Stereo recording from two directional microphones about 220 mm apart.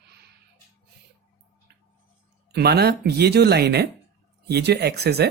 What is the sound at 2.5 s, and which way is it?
Speech, 45° right (ahead or behind).